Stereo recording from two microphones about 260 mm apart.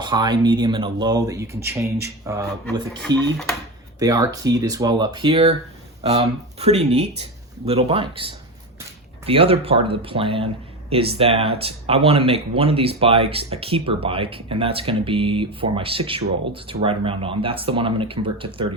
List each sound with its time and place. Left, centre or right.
0.0 s speech: centre
4.0 s speech: centre